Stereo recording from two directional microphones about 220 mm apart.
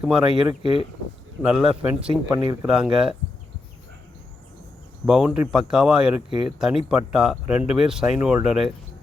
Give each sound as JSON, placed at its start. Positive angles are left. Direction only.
{"t": 0.0, "sound": "speech", "side_deg": -5}
{"t": 0.6, "sound": "speech", "side_deg": 25}
{"t": 1.4, "sound": "speech", "side_deg": -5}
{"t": 5.0, "sound": "speech", "side_deg": -5}